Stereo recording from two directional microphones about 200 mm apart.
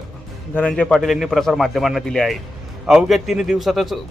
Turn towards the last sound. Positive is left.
turn(degrees=0)  # may be behind; listen again after turning